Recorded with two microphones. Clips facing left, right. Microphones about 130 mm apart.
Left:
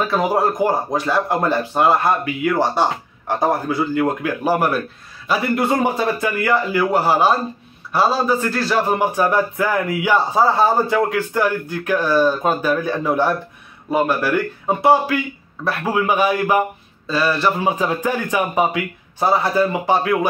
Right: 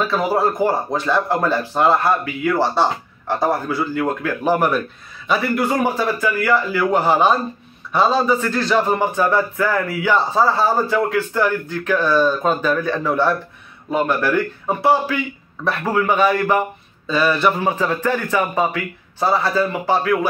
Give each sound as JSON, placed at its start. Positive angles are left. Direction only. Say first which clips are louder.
{"t": 0.0, "sound": "speech", "louder": "even", "side_deg": 15}
{"t": 5.5, "sound": "a man's voice", "louder": "left 3 dB", "side_deg": 25}
{"t": 6.9, "sound": "speech", "louder": "right 1 dB", "side_deg": 5}
{"t": 17.1, "sound": "speech", "louder": "right 1 dB", "side_deg": 0}
{"t": 17.6, "sound": "speech", "louder": "even", "side_deg": 15}